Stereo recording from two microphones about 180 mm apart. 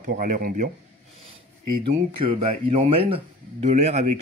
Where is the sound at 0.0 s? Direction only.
50° right (ahead or behind).